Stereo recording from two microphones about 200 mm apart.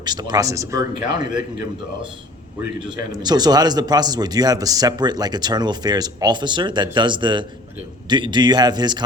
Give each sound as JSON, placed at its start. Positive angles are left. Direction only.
{"t": 0.0, "sound": "speech", "side_deg": -20}
{"t": 2.8, "sound": "speech", "side_deg": -20}